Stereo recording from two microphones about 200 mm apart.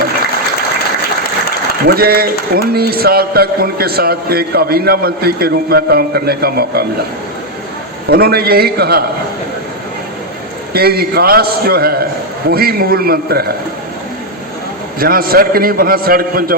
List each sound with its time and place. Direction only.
1.8 s a man's voice: 50° right (ahead or behind)
8.1 s a man's voice: 50° right (ahead or behind)
10.8 s a man's voice: 50° right (ahead or behind)
14.9 s a man's voice: 45° right (ahead or behind)